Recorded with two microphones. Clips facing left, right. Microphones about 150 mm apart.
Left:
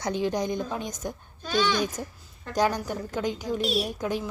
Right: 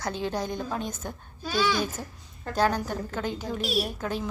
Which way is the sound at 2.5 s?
10° left (ahead or behind).